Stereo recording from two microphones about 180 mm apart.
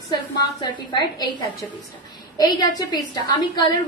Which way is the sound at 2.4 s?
20° left (ahead or behind).